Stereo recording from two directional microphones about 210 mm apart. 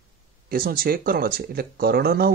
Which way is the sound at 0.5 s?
45° right (ahead or behind).